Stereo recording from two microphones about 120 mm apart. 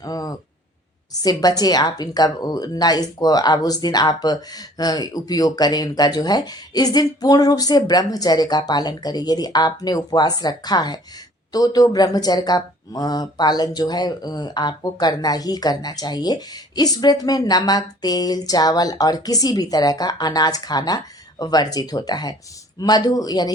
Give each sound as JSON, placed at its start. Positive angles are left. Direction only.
{"t": 0.0, "sound": "speech", "side_deg": 30}